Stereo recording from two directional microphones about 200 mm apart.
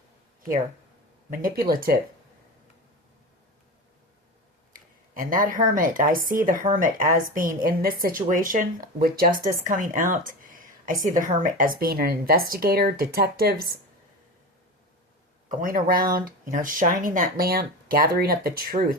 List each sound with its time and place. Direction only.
1.3 s speech: 45° right (ahead or behind)
5.1 s speech: 45° right (ahead or behind)
10.1 s a sound: 45° right (ahead or behind)
11.2 s speech: 40° right (ahead or behind)
15.4 s speech: 45° right (ahead or behind)